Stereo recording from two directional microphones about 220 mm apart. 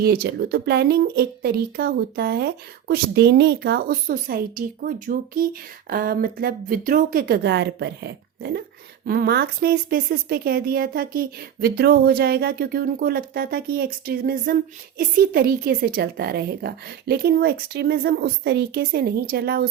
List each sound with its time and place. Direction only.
0.0 s speech: 45° right (ahead or behind)